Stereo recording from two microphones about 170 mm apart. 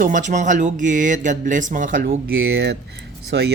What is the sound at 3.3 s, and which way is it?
Speech, 90° right.